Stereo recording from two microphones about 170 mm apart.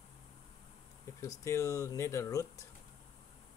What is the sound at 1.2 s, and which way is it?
Speech, 15° left (ahead or behind).